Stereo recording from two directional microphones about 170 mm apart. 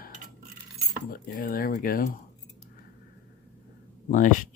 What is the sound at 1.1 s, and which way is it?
Speech, 55° left (ahead or behind).